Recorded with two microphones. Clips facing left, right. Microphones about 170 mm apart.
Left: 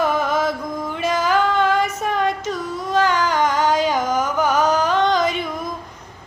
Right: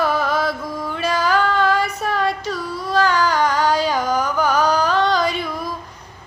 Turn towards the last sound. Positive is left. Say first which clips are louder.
# even
turn(degrees=20)  # may be behind; listen again after turning